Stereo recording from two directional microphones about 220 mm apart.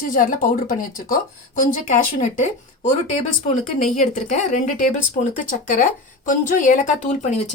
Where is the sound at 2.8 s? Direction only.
35° left (ahead or behind).